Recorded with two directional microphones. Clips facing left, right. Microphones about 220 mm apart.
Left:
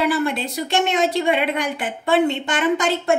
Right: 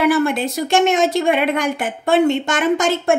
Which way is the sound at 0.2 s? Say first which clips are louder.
Right 4 dB; 45° right (ahead or behind).